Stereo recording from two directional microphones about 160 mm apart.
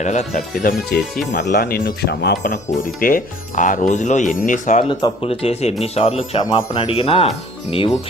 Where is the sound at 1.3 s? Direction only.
90° left.